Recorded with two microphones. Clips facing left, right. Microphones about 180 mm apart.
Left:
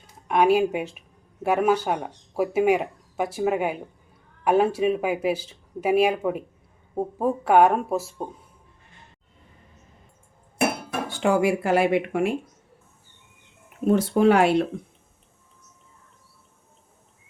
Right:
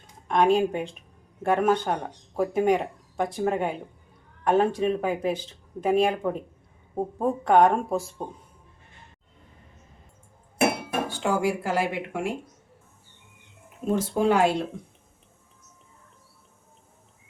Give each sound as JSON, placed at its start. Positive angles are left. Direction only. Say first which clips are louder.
{"t": 0.3, "sound": "speech", "louder": "left 2 dB", "side_deg": 5}
{"t": 11.2, "sound": "speech", "louder": "left 6 dB", "side_deg": 65}
{"t": 13.8, "sound": "speech", "louder": "left 5 dB", "side_deg": 65}